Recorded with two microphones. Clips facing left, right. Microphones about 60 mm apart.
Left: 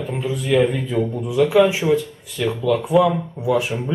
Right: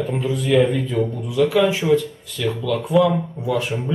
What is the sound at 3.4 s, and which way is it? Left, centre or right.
Speech, centre.